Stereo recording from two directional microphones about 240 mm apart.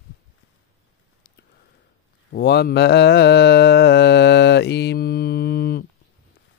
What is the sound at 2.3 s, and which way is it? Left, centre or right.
Mantra, left.